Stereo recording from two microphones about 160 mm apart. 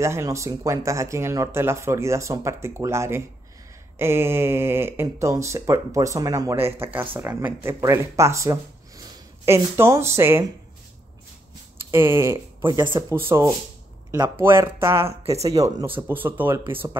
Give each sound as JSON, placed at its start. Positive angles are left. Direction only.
{"t": 0.0, "sound": "speech", "side_deg": -20}
{"t": 11.9, "sound": "speech", "side_deg": -15}
{"t": 14.4, "sound": "speech", "side_deg": -15}
{"t": 15.0, "sound": "speech", "side_deg": -40}
{"t": 15.5, "sound": "speech", "side_deg": -20}